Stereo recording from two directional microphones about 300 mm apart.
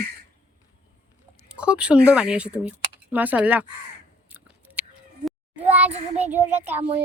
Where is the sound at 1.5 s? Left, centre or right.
Centre.